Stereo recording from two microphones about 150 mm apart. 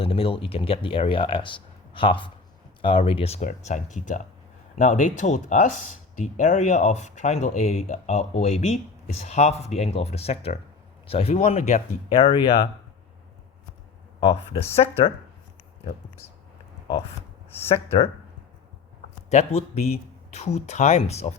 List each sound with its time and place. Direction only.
0.0 s speech: 40° left (ahead or behind)
14.2 s speech: 40° left (ahead or behind)
17.7 s speech: 40° left (ahead or behind)
19.3 s speech: 45° left (ahead or behind)